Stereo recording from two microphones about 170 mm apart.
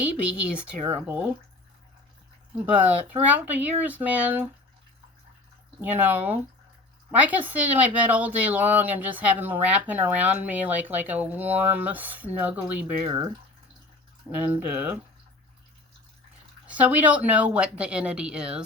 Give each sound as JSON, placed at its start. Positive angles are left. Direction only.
{"t": 0.0, "sound": "speech", "side_deg": -10}
{"t": 3.1, "sound": "speech", "side_deg": -10}
{"t": 5.8, "sound": "speech", "side_deg": -10}
{"t": 13.1, "sound": "speech", "side_deg": -20}
{"t": 16.6, "sound": "speech", "side_deg": -10}